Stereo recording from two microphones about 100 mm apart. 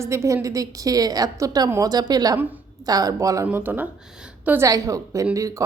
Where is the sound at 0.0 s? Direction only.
30° right (ahead or behind).